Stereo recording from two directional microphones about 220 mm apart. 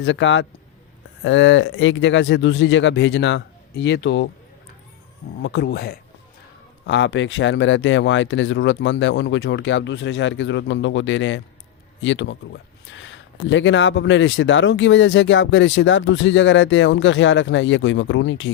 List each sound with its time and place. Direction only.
0.0 s speech: 55° left (ahead or behind)
5.4 s speech: 50° left (ahead or behind)